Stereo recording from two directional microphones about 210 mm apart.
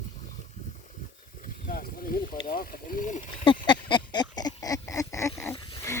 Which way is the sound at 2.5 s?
40° left (ahead or behind).